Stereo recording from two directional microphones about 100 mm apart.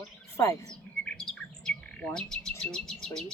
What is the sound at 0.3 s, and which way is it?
Speech, 25° left (ahead or behind).